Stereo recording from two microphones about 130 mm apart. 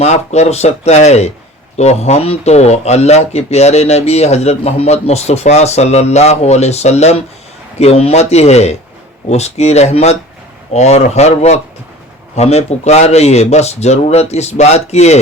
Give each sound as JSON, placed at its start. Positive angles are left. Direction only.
{"t": 0.0, "sound": "speech", "side_deg": 60}